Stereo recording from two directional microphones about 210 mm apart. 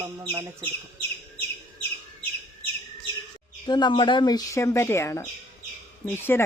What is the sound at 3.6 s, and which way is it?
Speech, 20° left (ahead or behind).